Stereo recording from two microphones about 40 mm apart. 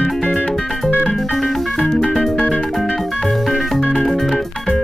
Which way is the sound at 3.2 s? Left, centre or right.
Centre.